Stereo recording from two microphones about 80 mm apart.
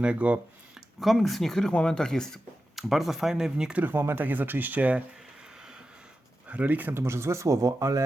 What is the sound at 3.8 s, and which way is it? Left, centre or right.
Speech, right.